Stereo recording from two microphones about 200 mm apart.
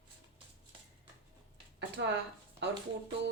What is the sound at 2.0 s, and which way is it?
Speech, 60° right (ahead or behind).